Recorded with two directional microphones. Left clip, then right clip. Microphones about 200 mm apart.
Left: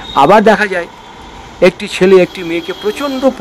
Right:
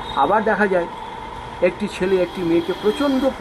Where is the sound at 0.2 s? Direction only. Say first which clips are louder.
Left 10 dB; 60° left (ahead or behind).